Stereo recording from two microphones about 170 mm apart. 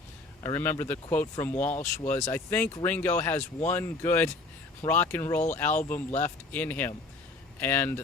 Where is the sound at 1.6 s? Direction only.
40° left (ahead or behind).